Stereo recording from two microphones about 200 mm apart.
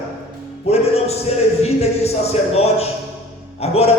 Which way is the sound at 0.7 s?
30° left (ahead or behind).